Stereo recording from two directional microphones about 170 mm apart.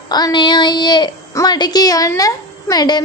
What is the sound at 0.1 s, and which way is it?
A woman's voice, 25° left (ahead or behind).